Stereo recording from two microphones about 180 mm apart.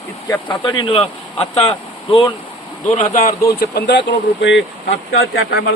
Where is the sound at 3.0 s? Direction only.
50° left (ahead or behind).